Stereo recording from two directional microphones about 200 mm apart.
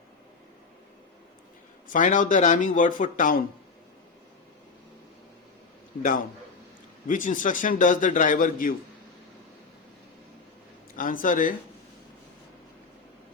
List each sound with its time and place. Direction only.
1.9 s a man's voice: 40° left (ahead or behind)
7.1 s a man's voice: 40° left (ahead or behind)
10.9 s speech: 45° left (ahead or behind)